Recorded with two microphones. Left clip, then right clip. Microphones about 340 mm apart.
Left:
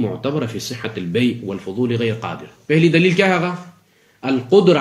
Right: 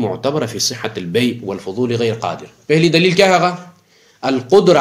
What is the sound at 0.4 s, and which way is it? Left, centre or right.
A man's voice, centre.